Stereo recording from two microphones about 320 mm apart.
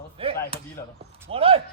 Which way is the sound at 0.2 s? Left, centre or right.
Centre.